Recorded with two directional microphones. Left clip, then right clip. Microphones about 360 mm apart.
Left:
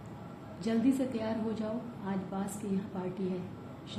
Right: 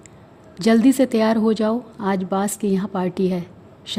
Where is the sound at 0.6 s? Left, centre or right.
Right.